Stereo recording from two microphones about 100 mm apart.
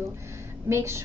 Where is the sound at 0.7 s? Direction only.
25° right (ahead or behind).